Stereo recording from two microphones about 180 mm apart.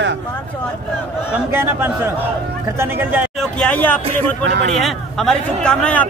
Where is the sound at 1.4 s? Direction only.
10° right (ahead or behind).